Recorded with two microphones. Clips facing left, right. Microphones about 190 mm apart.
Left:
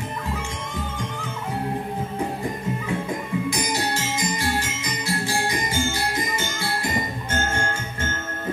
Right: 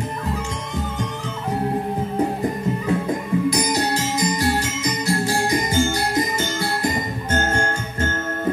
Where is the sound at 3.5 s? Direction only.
40° right (ahead or behind).